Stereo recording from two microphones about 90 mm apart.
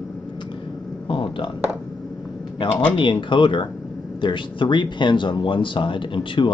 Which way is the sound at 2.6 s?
65° left (ahead or behind).